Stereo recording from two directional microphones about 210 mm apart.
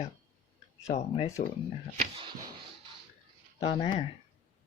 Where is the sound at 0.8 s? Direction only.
30° left (ahead or behind).